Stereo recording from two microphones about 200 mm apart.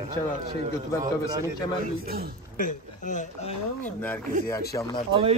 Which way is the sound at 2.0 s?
50° right (ahead or behind).